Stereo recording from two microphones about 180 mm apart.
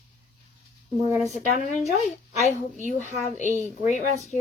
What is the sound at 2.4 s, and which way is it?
A woman's voice, 40° left (ahead or behind).